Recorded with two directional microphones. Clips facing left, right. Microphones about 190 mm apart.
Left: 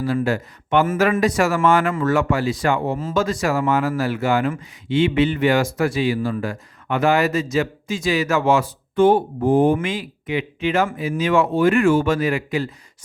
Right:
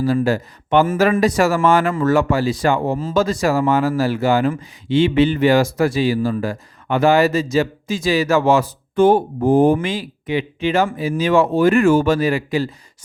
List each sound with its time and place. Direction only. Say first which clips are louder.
0.0 s speech: right 3 dB; 35° right (ahead or behind)